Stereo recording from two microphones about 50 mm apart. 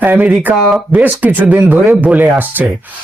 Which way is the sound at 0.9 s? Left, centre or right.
Right.